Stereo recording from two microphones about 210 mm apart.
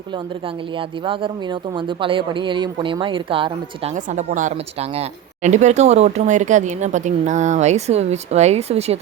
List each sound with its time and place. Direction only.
1.0 s speech: 25° right (ahead or behind)
3.9 s speech: 35° right (ahead or behind)